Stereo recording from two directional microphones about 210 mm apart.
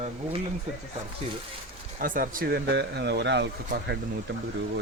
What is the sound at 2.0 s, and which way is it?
Speech, 40° right (ahead or behind).